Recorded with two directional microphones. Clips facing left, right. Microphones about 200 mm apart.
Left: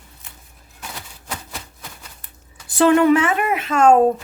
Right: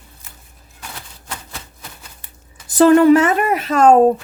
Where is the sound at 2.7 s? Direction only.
40° right (ahead or behind).